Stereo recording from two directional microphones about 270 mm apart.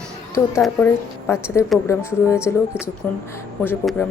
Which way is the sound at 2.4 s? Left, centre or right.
Centre.